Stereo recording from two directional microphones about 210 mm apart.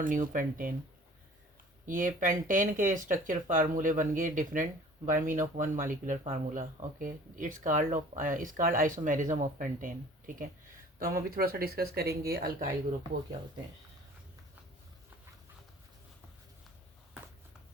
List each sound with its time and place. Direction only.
0.0 s speech: 40° right (ahead or behind)
1.9 s speech: 40° right (ahead or behind)